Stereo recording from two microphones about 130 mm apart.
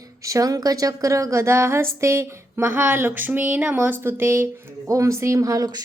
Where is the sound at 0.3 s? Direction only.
25° right (ahead or behind).